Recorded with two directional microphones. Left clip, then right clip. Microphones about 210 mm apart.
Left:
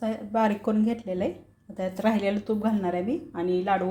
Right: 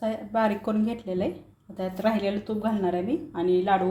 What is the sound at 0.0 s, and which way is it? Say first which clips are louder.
A woman's voice: even; 10° left (ahead or behind).